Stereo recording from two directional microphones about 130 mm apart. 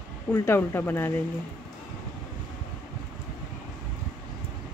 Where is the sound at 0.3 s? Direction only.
15° left (ahead or behind).